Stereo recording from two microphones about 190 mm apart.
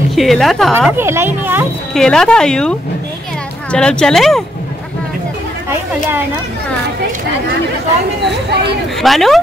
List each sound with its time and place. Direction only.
0.1 s a woman's voice: centre (ahead or behind)
0.9 s speech: 10° right (ahead or behind)
2.0 s a woman's voice: 5° left (ahead or behind)
3.7 s a woman's voice: 5° left (ahead or behind)
8.3 s speech: 65° right (ahead or behind)
9.0 s a woman's voice: centre (ahead or behind)